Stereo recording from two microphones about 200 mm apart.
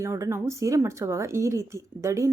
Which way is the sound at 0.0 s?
15° right (ahead or behind).